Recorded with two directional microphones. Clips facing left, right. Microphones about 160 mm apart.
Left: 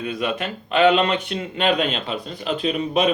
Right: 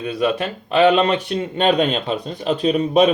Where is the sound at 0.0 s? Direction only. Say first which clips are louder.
Right 5 dB; 35° right (ahead or behind).